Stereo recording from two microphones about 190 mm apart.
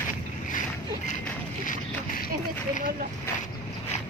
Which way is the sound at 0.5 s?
45° left (ahead or behind).